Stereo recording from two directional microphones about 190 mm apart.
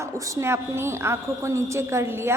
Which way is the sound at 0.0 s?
15° right (ahead or behind).